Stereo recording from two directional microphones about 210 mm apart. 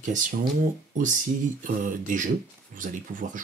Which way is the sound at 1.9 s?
40° right (ahead or behind).